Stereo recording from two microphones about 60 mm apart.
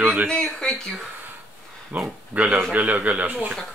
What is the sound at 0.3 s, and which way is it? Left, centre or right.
Speech, centre.